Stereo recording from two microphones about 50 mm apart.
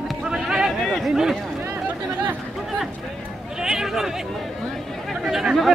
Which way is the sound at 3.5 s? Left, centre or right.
Centre.